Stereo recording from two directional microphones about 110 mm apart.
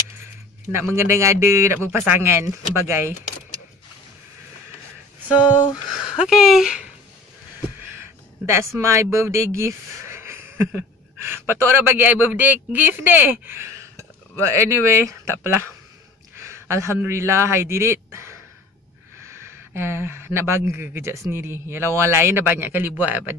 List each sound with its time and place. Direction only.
0.7 s a man's voice: 20° right (ahead or behind)
5.5 s a sound: 50° left (ahead or behind)
6.0 s speech: 5° right (ahead or behind)
8.0 s a man's voice: 25° right (ahead or behind)